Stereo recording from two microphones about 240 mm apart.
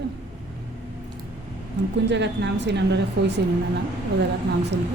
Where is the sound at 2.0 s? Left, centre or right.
Right.